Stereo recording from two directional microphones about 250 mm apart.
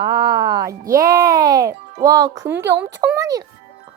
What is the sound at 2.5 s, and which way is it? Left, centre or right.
Speech, right.